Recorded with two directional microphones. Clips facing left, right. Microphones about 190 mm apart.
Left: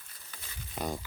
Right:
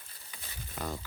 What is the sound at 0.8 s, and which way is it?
Crumpling, 20° left (ahead or behind).